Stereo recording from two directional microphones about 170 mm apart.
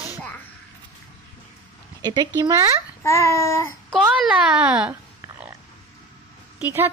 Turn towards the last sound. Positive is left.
turn(degrees=-10)  # may be behind; listen again after turning